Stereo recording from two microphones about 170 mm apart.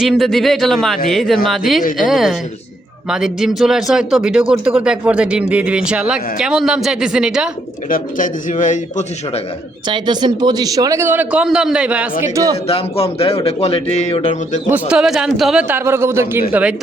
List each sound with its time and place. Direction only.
0.0 s speech: centre (ahead or behind)
7.9 s speech: 55° left (ahead or behind)
9.8 s a man's voice: 25° right (ahead or behind); by 12.0 s 5° right (ahead or behind)
12.2 s a man's voice: 20° right (ahead or behind)
12.6 s a man's voice: 35° left (ahead or behind)
14.7 s a man's voice: 5° right (ahead or behind)